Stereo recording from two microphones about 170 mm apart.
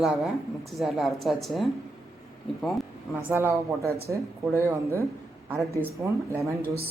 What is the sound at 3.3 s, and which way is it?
A woman's voice, 15° right (ahead or behind).